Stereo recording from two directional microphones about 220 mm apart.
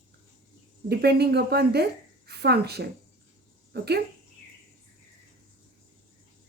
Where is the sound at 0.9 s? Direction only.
45° right (ahead or behind).